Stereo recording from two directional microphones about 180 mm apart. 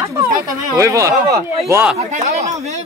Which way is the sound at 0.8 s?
15° right (ahead or behind).